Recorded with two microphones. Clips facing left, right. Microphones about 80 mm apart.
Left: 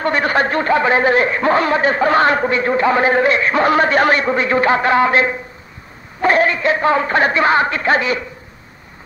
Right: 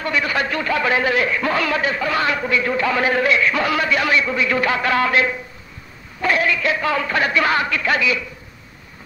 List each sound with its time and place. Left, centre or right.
0.0 s a man's voice: left